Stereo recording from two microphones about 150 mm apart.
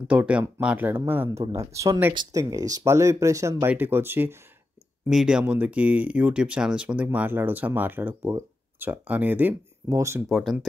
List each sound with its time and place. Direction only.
0.1 s speech: 10° right (ahead or behind)
1.4 s speech: 35° right (ahead or behind)
1.7 s speech: 20° right (ahead or behind)
5.0 s speech: 5° right (ahead or behind); by 10.2 s 20° right (ahead or behind)
10.2 s speech: centre (ahead or behind)